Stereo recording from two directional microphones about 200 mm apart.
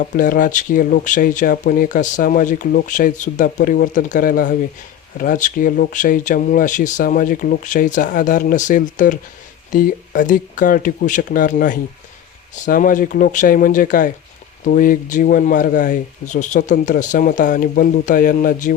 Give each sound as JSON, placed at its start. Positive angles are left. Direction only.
{"t": 0.0, "sound": "speech", "side_deg": 40}